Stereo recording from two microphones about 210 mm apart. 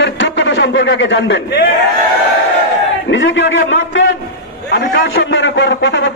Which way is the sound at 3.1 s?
60° left (ahead or behind).